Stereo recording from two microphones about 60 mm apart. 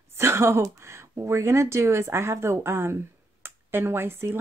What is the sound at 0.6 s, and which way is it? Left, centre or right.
Speech, right.